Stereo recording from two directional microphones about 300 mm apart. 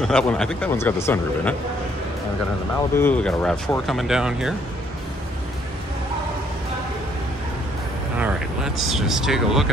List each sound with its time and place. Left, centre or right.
0.0 s speech: centre
3.0 s speech: centre
8.2 s speech: centre